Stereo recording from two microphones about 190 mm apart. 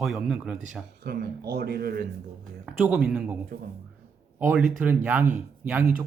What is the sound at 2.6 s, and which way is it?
Speech, 5° right (ahead or behind).